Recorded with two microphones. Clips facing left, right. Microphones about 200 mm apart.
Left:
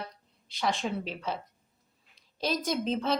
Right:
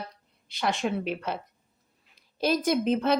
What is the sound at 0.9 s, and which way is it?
Speech, 60° right (ahead or behind).